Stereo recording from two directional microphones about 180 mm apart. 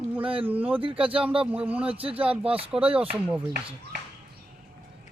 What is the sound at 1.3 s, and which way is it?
Speech, 30° right (ahead or behind).